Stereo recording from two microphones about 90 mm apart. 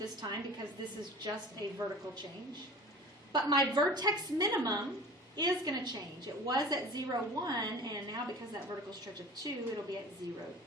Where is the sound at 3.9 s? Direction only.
50° right (ahead or behind).